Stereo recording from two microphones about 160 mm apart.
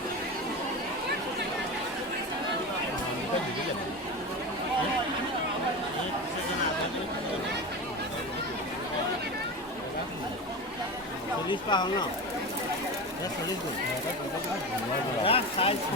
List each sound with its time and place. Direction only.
11.4 s speech: 30° left (ahead or behind)
15.2 s speech: 35° left (ahead or behind)